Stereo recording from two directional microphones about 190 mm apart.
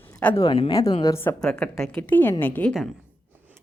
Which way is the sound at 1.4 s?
5° left (ahead or behind).